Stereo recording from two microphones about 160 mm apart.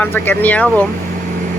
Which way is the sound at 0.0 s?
10° left (ahead or behind).